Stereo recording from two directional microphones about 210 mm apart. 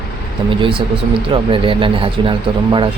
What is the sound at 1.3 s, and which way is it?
Speech, 25° right (ahead or behind).